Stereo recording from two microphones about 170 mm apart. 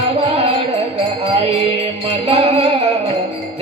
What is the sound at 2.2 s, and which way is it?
Music, 35° right (ahead or behind).